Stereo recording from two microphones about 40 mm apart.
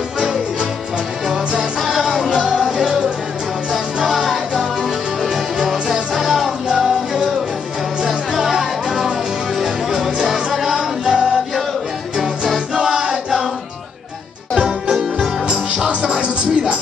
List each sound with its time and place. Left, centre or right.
0.2 s music: centre
12.2 s music: centre
14.5 s music: centre
15.9 s music: right